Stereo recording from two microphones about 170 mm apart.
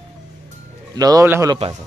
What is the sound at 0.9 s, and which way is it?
Speech, 20° right (ahead or behind).